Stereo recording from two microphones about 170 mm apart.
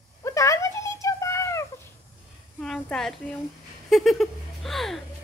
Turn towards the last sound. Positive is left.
turn(degrees=0)  # may be behind; listen again after turning